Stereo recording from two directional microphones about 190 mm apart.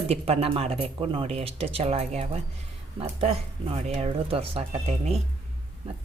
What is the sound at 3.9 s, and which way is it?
Speech, 30° right (ahead or behind).